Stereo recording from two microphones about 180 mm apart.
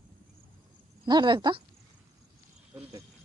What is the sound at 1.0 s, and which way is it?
Speech, 25° right (ahead or behind).